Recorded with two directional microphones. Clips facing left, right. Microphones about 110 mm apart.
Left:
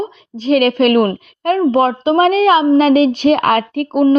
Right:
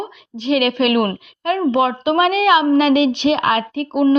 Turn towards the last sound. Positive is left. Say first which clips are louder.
# left 3 dB
turn(degrees=45)  # may be behind; listen again after turning